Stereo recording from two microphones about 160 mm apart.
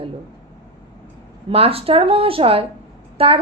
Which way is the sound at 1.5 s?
35° right (ahead or behind).